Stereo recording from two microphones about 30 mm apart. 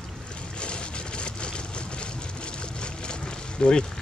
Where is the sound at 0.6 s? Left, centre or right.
Left.